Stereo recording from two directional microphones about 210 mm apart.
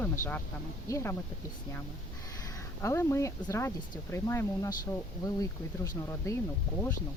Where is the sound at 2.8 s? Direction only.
15° left (ahead or behind).